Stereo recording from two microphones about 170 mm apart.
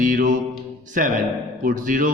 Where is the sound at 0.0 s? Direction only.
55° right (ahead or behind).